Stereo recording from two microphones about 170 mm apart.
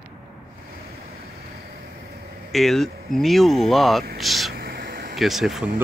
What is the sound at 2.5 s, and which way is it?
Speech, centre (ahead or behind).